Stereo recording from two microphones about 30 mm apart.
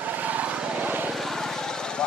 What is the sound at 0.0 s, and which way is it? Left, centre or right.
Vehicle, right.